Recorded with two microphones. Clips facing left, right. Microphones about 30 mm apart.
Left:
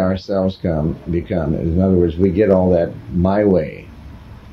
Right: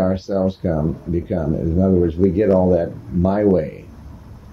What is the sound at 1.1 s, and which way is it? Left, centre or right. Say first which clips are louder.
Speech: left 3 dB; left.